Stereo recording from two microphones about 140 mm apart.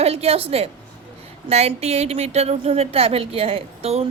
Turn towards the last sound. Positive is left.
turn(degrees=-45)  # may be behind; listen again after turning